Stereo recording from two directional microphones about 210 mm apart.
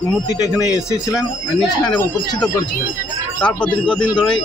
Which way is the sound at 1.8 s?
20° left (ahead or behind).